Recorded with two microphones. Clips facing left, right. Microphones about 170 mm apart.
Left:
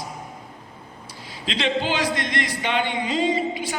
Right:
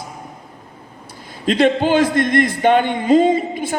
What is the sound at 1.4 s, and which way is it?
A man's voice, 50° right (ahead or behind).